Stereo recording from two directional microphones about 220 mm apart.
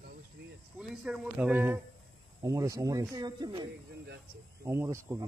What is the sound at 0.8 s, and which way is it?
Speech, 5° right (ahead or behind).